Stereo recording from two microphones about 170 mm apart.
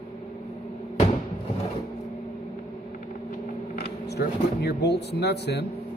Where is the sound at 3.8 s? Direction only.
70° left (ahead or behind).